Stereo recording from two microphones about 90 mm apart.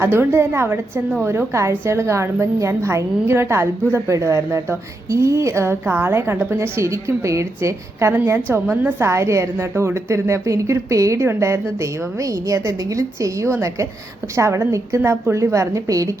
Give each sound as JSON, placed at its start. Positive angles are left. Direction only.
{"t": 0.0, "sound": "a woman's voice", "side_deg": -25}
{"t": 8.1, "sound": "a woman's voice", "side_deg": -20}